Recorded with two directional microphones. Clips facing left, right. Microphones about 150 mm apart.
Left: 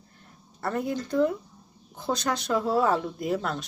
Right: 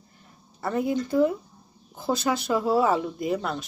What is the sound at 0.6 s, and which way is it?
Speech, centre (ahead or behind).